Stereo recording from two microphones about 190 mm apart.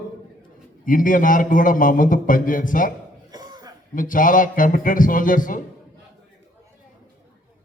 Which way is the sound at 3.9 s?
45° left (ahead or behind).